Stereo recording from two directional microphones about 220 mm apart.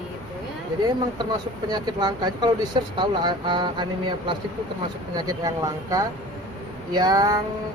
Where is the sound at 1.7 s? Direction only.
20° right (ahead or behind).